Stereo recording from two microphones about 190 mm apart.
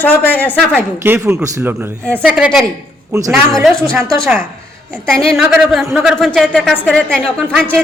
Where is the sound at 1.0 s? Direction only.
10° right (ahead or behind).